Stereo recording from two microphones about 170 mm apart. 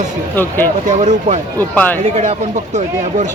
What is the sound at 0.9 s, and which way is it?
Speech, 45° right (ahead or behind).